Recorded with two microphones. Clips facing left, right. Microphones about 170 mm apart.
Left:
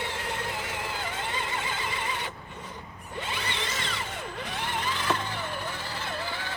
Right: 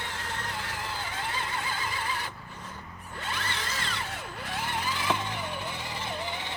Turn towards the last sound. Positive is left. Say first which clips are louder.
# even
turn(degrees=-20)  # may be behind; listen again after turning